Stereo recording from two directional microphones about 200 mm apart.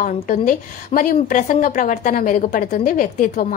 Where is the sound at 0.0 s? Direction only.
40° left (ahead or behind).